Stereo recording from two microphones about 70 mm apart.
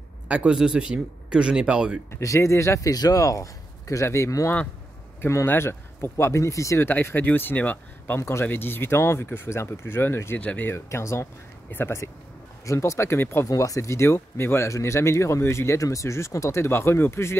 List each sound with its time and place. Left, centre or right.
0.3 s speech: centre
2.0 s speech: left
2.9 s speech: left
5.5 s speech: left
6.9 s speech: left
8.2 s speech: left
10.4 s speech: centre
10.7 s speech: left
13.5 s speech: left